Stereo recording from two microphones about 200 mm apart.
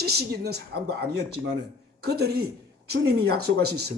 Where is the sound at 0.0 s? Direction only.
50° right (ahead or behind).